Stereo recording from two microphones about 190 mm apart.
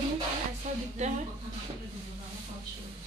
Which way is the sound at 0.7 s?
40° right (ahead or behind).